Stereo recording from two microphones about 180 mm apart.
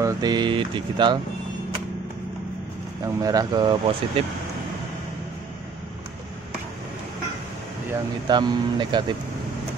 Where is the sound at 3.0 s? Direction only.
20° right (ahead or behind).